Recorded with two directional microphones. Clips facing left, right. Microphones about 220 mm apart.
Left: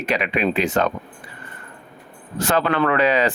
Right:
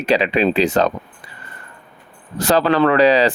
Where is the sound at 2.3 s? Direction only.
35° right (ahead or behind).